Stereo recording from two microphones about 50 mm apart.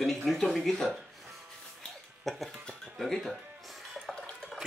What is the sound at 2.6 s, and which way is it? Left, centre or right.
Speech, centre.